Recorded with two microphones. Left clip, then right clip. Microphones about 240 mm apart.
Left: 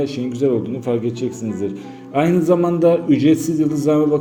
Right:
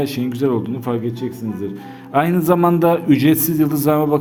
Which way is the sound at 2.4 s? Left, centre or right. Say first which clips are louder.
Even; right.